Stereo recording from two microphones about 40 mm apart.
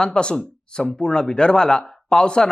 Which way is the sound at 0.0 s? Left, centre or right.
Left.